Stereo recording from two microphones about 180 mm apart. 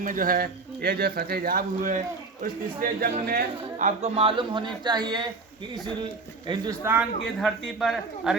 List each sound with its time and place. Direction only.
0.0 s a man's voice: 50° right (ahead or behind); by 5.2 s 25° right (ahead or behind)
6.5 s speech: 15° right (ahead or behind)